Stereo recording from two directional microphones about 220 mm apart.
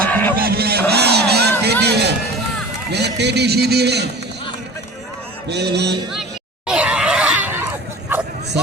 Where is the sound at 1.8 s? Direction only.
50° right (ahead or behind).